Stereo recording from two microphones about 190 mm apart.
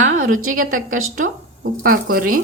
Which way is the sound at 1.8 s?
50° right (ahead or behind).